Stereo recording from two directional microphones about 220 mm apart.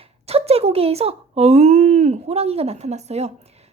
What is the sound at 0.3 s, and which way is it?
Speech, 25° right (ahead or behind).